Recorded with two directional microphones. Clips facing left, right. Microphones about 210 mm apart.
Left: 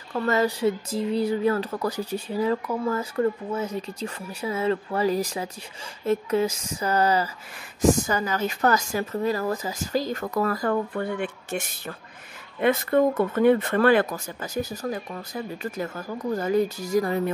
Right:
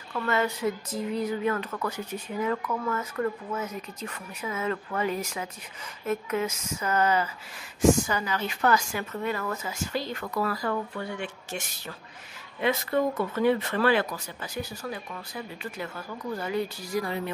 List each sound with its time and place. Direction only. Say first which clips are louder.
0.1 s speech: left 4 dB; 35° left (ahead or behind)